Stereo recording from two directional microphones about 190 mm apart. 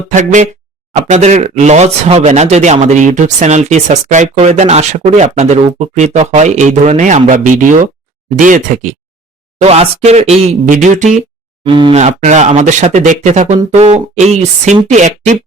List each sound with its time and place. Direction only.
0.1 s speech: 40° right (ahead or behind)
11.6 s speech: 25° right (ahead or behind)